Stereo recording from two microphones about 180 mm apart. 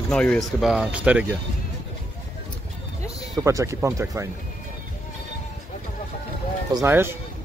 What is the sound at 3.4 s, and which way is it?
Speech, 15° right (ahead or behind).